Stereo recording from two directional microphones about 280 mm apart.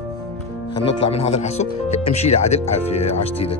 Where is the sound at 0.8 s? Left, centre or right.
Left.